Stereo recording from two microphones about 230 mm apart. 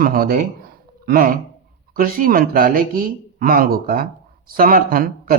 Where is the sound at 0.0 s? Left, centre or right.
Right.